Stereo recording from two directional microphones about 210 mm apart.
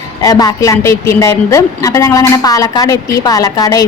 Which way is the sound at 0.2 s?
20° left (ahead or behind).